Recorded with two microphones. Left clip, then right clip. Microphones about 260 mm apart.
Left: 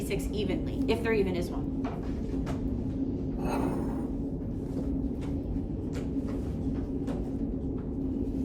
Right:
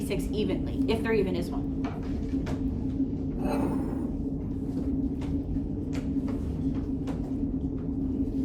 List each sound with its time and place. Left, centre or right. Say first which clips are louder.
0.1 s a woman's voice: right 2 dB; centre